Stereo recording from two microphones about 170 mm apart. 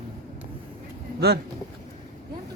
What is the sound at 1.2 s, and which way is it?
Speech, 70° right (ahead or behind).